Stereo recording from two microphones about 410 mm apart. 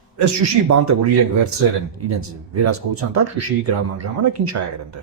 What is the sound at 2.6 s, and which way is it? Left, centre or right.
Speech, right.